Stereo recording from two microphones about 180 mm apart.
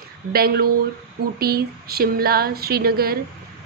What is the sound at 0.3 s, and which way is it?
A woman's voice, 60° right (ahead or behind).